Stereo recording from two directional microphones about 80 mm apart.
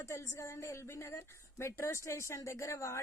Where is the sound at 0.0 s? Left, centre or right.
Left.